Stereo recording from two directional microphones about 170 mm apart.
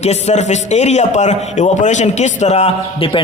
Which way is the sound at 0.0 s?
40° left (ahead or behind).